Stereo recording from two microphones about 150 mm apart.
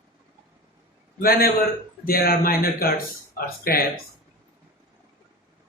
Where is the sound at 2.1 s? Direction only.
85° left.